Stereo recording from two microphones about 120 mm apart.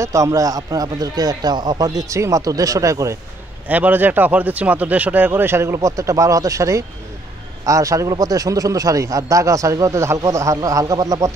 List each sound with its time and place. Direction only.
0.0 s a man's voice: 25° right (ahead or behind)
3.6 s a man's voice: 15° right (ahead or behind)